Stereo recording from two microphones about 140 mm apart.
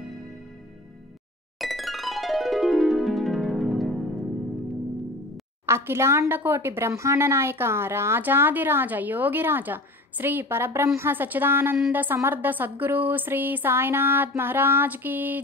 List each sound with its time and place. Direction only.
1.6 s music: centre (ahead or behind)
5.7 s a woman's voice: 15° right (ahead or behind)